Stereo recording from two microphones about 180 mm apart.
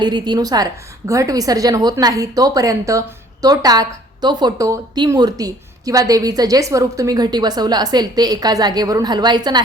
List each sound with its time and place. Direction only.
0.0 s a woman's voice: 25° right (ahead or behind)